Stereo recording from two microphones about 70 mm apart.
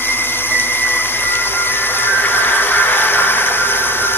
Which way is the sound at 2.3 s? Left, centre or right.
Left.